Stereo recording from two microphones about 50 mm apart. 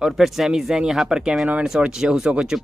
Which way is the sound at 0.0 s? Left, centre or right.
Centre.